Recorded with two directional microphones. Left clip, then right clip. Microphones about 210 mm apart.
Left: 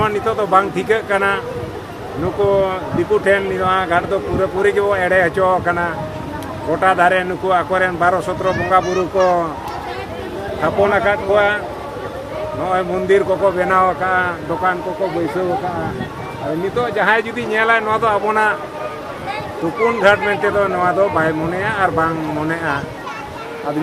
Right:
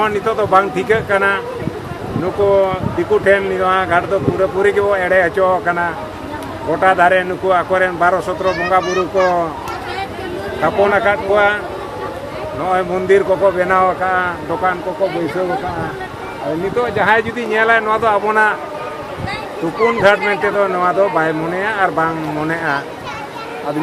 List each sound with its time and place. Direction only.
0.0 s speech: 10° right (ahead or behind)
2.5 s speech: 5° right (ahead or behind)
8.8 s speech: 15° right (ahead or behind)
9.2 s speech: 5° left (ahead or behind)
10.6 s speech: centre (ahead or behind)
12.6 s speech: 5° right (ahead or behind)
16.8 s speech: 10° right (ahead or behind)
19.8 s speech: 10° right (ahead or behind)